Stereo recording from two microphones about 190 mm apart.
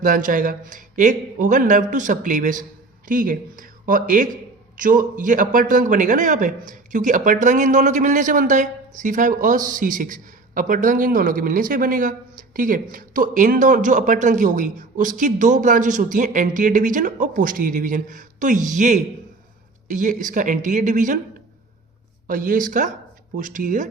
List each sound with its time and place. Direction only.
0.0 s a man's voice: 45° right (ahead or behind)
22.3 s a man's voice: 45° right (ahead or behind)